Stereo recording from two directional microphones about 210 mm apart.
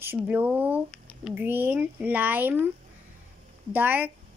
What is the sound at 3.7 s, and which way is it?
Speech, 10° right (ahead or behind).